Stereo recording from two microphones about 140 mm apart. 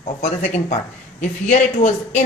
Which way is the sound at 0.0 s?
60° left (ahead or behind).